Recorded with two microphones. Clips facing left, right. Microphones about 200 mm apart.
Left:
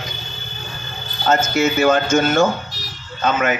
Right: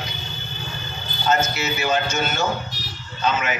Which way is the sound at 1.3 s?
50° left (ahead or behind).